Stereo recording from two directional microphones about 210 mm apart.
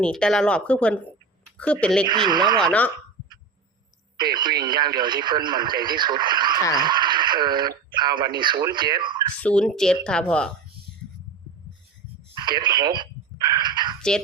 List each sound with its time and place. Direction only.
0.0 s speech: 5° left (ahead or behind)
2.0 s speech: 20° right (ahead or behind)
2.6 s speech: 5° left (ahead or behind)
4.2 s speech: 20° right (ahead or behind)
9.4 s speech: 5° left (ahead or behind)
12.4 s telephone: 20° right (ahead or behind)